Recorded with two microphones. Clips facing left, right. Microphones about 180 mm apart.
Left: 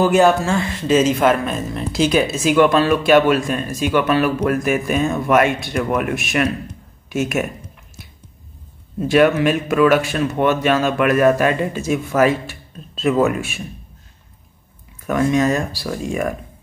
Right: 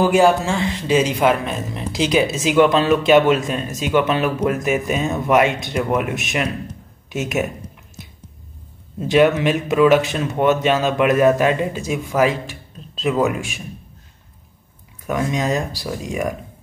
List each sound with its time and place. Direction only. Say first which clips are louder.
0.0 s speech: left 1 dB; 10° right (ahead or behind)
9.0 s speech: left 1 dB; 20° right (ahead or behind)
15.0 s speech: left 4 dB; 15° right (ahead or behind)